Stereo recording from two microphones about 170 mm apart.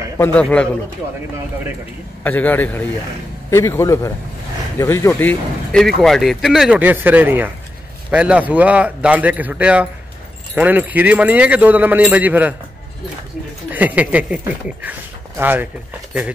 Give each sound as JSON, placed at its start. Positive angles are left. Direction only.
{"t": 0.2, "sound": "speech", "side_deg": 5}
{"t": 2.2, "sound": "speech", "side_deg": 10}
{"t": 13.7, "sound": "speech", "side_deg": -10}